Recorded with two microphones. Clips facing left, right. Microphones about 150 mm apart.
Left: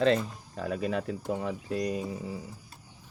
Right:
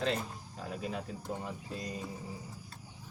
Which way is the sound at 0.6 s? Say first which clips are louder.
Left 8 dB; 80° left.